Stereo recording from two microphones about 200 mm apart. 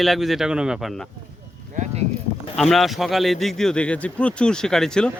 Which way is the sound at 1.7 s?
35° right (ahead or behind).